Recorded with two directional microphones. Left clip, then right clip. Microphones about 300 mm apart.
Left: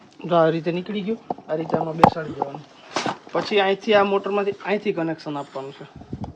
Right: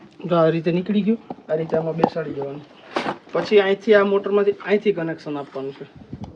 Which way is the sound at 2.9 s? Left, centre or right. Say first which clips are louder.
Right 1 dB; centre.